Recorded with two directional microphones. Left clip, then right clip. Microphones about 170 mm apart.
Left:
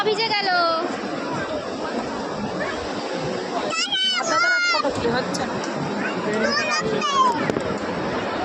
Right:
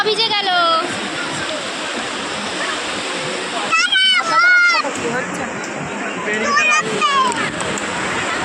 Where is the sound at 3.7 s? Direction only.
Centre (ahead or behind).